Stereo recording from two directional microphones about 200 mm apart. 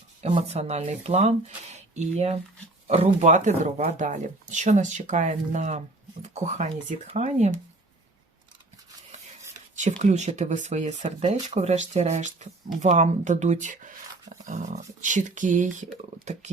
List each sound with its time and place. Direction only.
0.2 s speech: 30° right (ahead or behind)
9.8 s speech: 35° right (ahead or behind)